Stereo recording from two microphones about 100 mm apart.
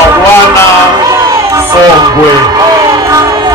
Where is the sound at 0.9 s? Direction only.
35° right (ahead or behind).